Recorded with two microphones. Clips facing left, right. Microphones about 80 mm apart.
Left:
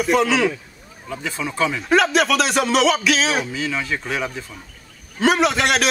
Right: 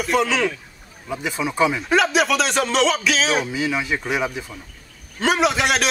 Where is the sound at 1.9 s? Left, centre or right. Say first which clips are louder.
Left 5 dB; centre.